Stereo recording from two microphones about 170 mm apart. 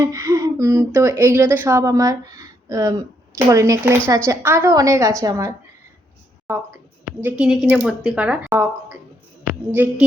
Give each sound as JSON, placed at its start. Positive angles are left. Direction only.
{"t": 0.0, "sound": "speech", "side_deg": -20}
{"t": 6.5, "sound": "a woman's voice", "side_deg": -10}